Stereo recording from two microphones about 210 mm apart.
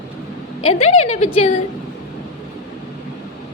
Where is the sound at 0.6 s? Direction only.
30° left (ahead or behind).